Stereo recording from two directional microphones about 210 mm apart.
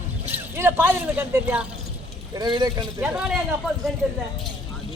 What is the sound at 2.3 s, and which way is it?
Speech, 20° right (ahead or behind).